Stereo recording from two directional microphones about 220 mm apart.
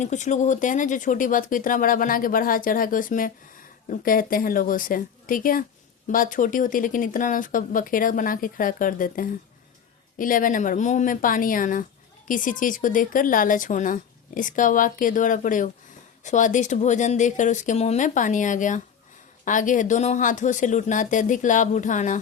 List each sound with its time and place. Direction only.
0.0 s speech: 35° left (ahead or behind)